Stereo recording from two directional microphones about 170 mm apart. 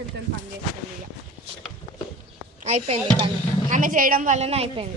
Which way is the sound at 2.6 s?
35° right (ahead or behind).